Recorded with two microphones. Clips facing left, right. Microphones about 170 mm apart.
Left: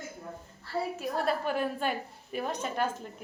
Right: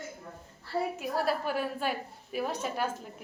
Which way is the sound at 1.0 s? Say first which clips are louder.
Even; 5° right (ahead or behind).